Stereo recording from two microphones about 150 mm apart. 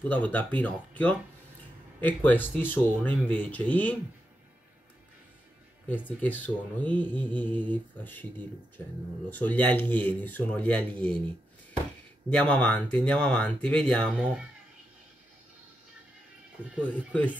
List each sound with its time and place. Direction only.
0.0 s speech: 10° left (ahead or behind)
5.9 s speech: 10° left (ahead or behind)
12.3 s speech: 5° left (ahead or behind)
16.5 s speech: 10° right (ahead or behind)
16.8 s speech: 10° left (ahead or behind)